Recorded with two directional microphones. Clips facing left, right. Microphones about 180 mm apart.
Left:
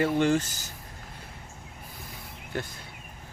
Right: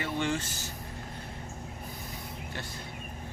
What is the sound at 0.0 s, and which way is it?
Speech, 45° left (ahead or behind).